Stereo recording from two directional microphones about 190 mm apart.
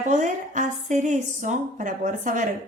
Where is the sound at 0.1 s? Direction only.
40° right (ahead or behind).